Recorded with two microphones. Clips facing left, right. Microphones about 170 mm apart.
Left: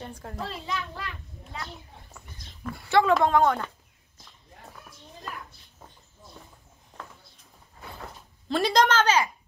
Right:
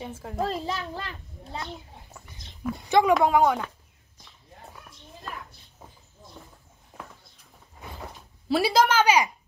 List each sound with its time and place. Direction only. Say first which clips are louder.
0.0 s a child's voice: right 2 dB; 5° right (ahead or behind)
0.4 s a child's voice: right 5 dB; 40° right (ahead or behind)
2.7 s a woman's voice: right 1 dB; 20° right (ahead or behind)
8.5 s a woman's voice: right 1 dB; 10° right (ahead or behind)